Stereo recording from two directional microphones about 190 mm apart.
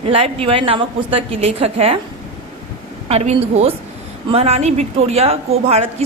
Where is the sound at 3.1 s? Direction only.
35° right (ahead or behind).